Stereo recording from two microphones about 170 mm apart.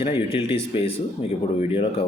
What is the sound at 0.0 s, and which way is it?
A man's voice, 30° left (ahead or behind).